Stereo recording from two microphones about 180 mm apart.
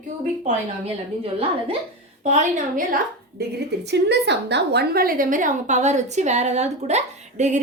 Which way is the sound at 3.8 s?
70° right (ahead or behind).